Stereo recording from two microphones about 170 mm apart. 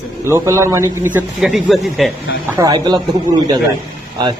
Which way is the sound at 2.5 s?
25° right (ahead or behind).